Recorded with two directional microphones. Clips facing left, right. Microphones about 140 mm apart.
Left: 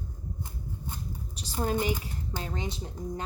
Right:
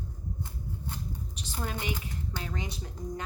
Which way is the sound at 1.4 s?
35° left (ahead or behind).